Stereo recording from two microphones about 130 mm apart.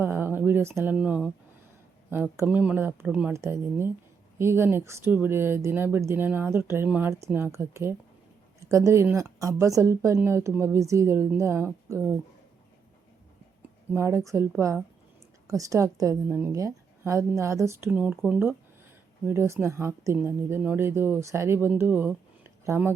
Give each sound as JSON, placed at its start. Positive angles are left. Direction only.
{"t": 0.0, "sound": "a sound", "side_deg": -15}
{"t": 0.9, "sound": "speech", "side_deg": -10}
{"t": 3.3, "sound": "a woman's voice", "side_deg": -20}
{"t": 13.9, "sound": "a woman's voice", "side_deg": -20}
{"t": 15.4, "sound": "a woman's voice", "side_deg": -25}
{"t": 19.2, "sound": "a woman's voice", "side_deg": -20}